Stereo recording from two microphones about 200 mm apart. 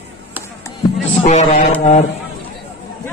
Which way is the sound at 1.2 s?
35° left (ahead or behind).